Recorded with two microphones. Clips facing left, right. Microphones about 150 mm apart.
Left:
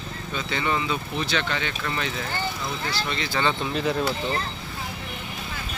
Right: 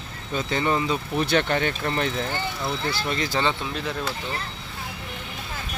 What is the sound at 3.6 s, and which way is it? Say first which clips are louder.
Speech: left 4 dB; 5° left (ahead or behind).